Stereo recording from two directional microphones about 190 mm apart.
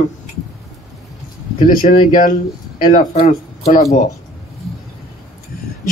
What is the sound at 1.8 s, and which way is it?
Speech, 45° left (ahead or behind).